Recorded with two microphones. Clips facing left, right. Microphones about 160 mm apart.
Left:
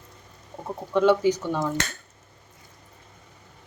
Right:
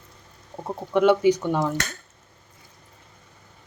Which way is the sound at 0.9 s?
15° right (ahead or behind).